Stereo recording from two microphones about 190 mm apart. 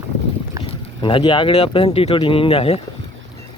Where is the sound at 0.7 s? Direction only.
25° left (ahead or behind).